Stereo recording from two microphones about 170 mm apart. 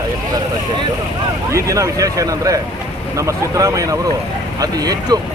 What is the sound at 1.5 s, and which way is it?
Speech, 20° right (ahead or behind).